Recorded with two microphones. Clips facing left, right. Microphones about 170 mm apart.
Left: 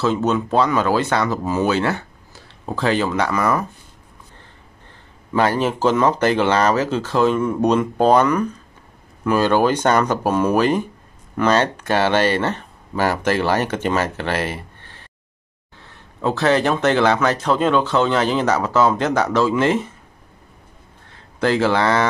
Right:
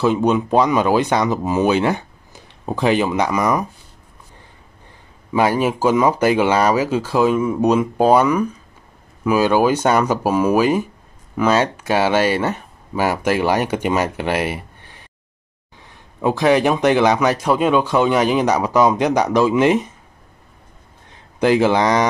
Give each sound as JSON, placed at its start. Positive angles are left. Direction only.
{"t": 0.0, "sound": "speech", "side_deg": -15}
{"t": 5.3, "sound": "speech", "side_deg": -10}
{"t": 21.1, "sound": "speech", "side_deg": -15}